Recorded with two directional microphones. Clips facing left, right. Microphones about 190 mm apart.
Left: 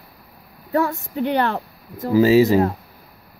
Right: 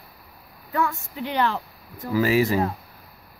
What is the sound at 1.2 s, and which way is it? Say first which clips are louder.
Speech: left 4 dB; 55° left (ahead or behind).